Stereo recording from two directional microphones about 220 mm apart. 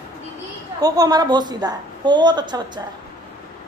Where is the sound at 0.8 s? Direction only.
15° right (ahead or behind).